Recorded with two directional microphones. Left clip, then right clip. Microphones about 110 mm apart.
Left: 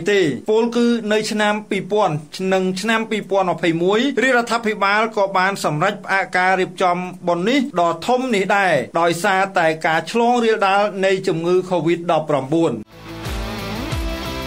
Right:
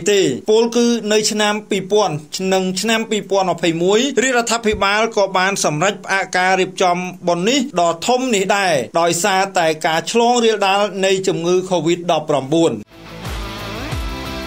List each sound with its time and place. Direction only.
0.0 s speech: 40° right (ahead or behind)